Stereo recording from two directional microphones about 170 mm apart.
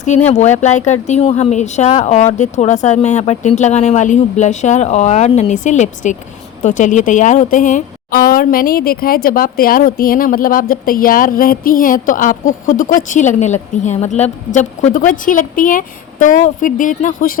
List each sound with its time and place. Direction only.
0.6 s speech: 45° left (ahead or behind)